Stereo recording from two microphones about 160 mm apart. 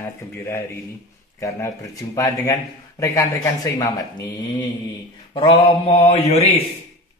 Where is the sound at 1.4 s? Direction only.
20° left (ahead or behind).